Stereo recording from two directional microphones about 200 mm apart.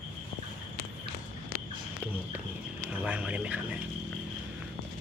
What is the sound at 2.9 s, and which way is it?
Speech, 5° right (ahead or behind).